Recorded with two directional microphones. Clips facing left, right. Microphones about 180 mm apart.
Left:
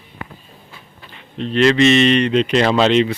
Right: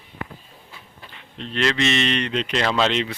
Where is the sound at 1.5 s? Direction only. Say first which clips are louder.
Left 9 dB; 10° left (ahead or behind).